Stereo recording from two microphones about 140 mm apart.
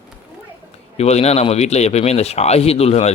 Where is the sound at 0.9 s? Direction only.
50° left (ahead or behind).